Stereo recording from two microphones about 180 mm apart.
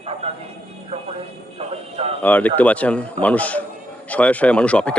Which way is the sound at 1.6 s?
35° right (ahead or behind).